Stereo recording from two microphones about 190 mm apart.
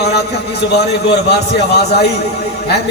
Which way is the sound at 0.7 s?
60° left (ahead or behind).